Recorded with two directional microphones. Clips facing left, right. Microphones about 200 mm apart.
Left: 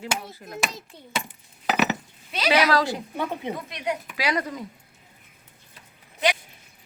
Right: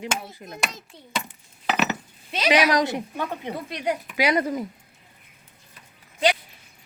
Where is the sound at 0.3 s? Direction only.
20° right (ahead or behind).